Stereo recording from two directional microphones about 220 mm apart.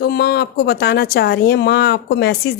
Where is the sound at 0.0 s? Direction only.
45° left (ahead or behind).